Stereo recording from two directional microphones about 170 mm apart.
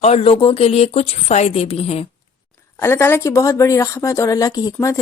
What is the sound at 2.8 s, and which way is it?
A woman's voice, 15° left (ahead or behind).